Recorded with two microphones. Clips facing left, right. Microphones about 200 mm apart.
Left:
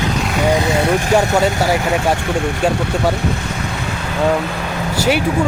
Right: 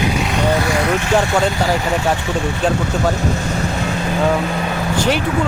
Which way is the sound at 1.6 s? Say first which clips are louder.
Left 1 dB; 10° left (ahead or behind).